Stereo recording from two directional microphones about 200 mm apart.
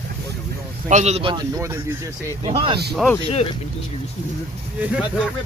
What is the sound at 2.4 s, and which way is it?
Speech, 25° right (ahead or behind).